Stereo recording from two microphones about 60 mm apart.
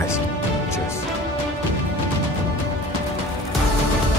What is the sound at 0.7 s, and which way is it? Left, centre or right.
Music, left.